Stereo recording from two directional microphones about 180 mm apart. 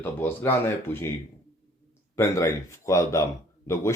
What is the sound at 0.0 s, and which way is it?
Speech, 10° left (ahead or behind).